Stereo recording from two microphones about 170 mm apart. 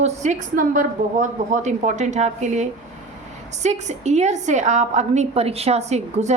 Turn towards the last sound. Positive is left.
turn(degrees=-40)  # may be behind; listen again after turning